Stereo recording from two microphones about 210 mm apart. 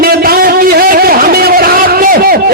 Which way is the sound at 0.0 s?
45° right (ahead or behind).